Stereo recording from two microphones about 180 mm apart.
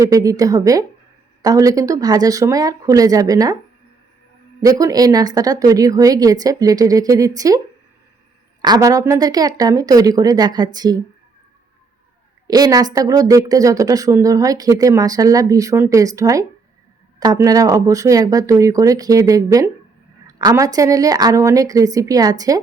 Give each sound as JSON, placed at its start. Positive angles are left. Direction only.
{"t": 0.0, "sound": "speech", "side_deg": -20}
{"t": 4.6, "sound": "speech", "side_deg": -20}
{"t": 8.6, "sound": "speech", "side_deg": -20}
{"t": 12.5, "sound": "speech", "side_deg": -20}
{"t": 20.2, "sound": "a sound", "side_deg": -20}
{"t": 20.7, "sound": "speech", "side_deg": -20}